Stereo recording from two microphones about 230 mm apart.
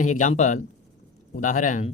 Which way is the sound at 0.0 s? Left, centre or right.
Left.